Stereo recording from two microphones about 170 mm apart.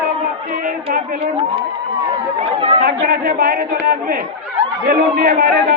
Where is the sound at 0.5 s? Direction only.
55° right (ahead or behind).